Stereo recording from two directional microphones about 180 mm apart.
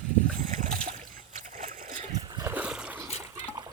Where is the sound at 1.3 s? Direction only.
45° right (ahead or behind).